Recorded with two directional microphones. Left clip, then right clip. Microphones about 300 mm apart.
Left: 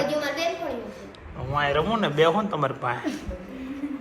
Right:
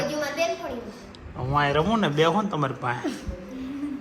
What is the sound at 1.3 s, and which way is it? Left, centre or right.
Speech, right.